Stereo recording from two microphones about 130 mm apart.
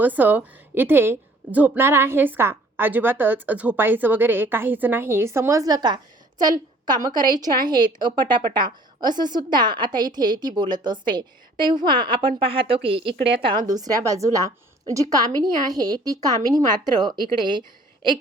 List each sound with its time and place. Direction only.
0.0 s a woman's voice: 15° right (ahead or behind); by 13.7 s 40° right (ahead or behind)
13.7 s a woman's voice: 30° right (ahead or behind)